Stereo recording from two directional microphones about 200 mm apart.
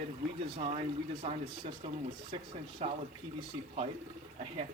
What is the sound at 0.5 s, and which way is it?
Speech, 30° right (ahead or behind).